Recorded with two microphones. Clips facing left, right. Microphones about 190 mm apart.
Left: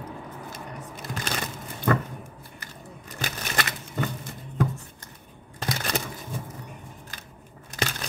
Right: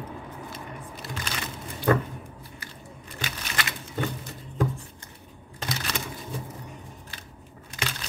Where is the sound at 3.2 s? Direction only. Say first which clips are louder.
Left 4 dB; 50° left (ahead or behind).